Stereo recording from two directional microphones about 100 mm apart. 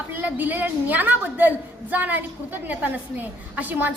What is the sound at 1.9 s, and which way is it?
A woman's voice, 15° right (ahead or behind).